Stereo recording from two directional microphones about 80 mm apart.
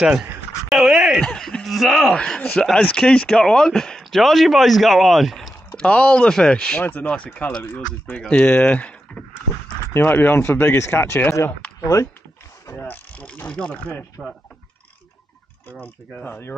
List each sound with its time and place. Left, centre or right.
0.0 s speech: centre
0.7 s a sound: centre
1.2 s speech: centre
2.1 s speech: centre
5.8 s speech: centre
11.8 s speech: left
12.7 s ratchet: left
14.2 s speech: centre
15.7 s speech: left